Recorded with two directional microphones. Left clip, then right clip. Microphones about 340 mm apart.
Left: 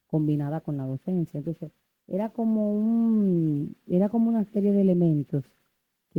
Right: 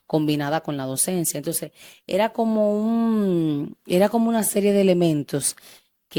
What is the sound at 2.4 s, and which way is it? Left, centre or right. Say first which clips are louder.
Speech: right 7 dB; centre.